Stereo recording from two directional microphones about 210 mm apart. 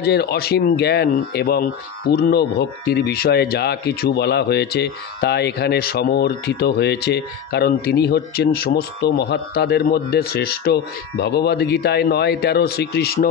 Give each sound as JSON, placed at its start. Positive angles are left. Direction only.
{"t": 0.0, "sound": "speech", "side_deg": 50}